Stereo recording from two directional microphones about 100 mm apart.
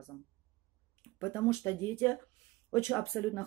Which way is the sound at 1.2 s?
25° left (ahead or behind).